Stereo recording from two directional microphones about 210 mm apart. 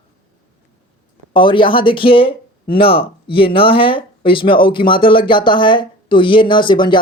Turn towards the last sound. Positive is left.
turn(degrees=20)  # may be behind; listen again after turning